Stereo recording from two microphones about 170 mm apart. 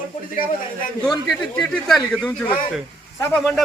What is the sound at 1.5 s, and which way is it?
Speech, 5° left (ahead or behind).